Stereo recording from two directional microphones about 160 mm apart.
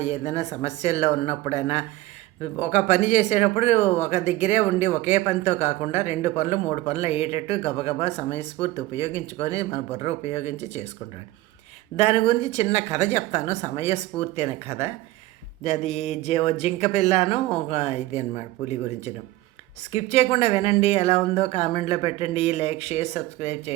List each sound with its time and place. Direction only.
0.0 s speech: 40° left (ahead or behind)
11.9 s speech: 40° left (ahead or behind)
19.9 s speech: 40° left (ahead or behind)